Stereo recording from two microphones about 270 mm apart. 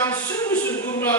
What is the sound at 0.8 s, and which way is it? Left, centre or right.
Music, centre.